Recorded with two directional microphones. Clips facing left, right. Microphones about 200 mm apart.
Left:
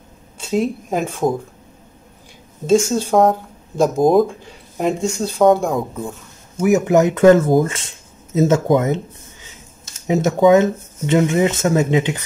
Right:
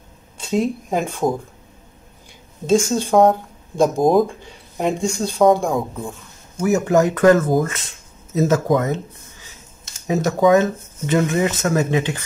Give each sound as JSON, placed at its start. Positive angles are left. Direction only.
{"t": 0.4, "sound": "speech", "side_deg": 5}
{"t": 2.6, "sound": "speech", "side_deg": 5}
{"t": 6.5, "sound": "speech", "side_deg": 20}
{"t": 10.0, "sound": "speech", "side_deg": 20}